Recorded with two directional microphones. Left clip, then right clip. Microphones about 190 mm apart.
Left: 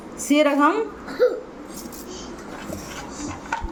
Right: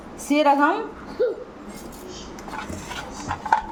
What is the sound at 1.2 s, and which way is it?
Hiccup, 30° left (ahead or behind).